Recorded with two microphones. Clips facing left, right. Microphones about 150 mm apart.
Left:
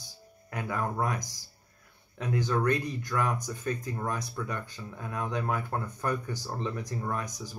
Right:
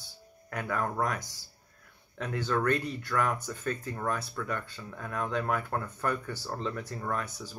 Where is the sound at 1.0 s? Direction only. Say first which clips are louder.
Even; 15° left (ahead or behind).